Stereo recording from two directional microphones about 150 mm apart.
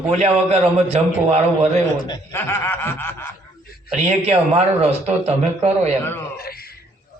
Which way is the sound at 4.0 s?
45° right (ahead or behind).